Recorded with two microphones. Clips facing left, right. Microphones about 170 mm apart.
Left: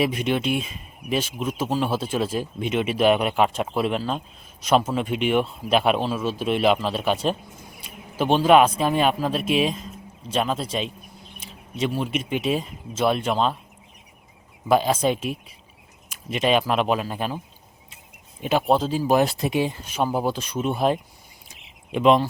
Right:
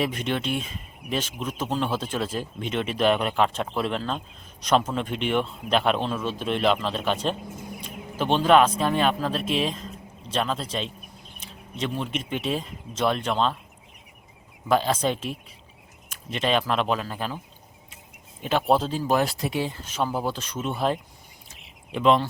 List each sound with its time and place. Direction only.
0.0 s speech: 10° left (ahead or behind)
14.7 s speech: 10° left (ahead or behind)
18.6 s speech: centre (ahead or behind)
18.9 s speech: 10° left (ahead or behind)
19.2 s speech: 25° left (ahead or behind)
21.5 s a sound: 15° left (ahead or behind)